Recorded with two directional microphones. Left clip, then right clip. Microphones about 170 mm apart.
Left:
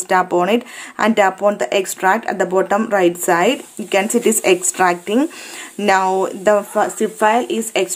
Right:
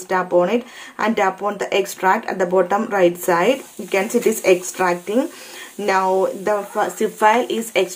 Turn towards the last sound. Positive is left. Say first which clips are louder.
# left 1 dB
turn(degrees=30)  # may be behind; listen again after turning